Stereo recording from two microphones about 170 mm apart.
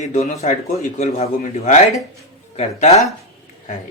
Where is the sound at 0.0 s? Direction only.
45° left (ahead or behind).